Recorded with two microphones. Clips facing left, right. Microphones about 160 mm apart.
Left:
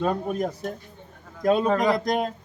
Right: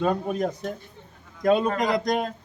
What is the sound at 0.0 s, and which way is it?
A man's voice, 5° left (ahead or behind).